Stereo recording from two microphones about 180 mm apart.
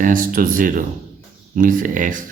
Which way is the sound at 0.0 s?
50° right (ahead or behind).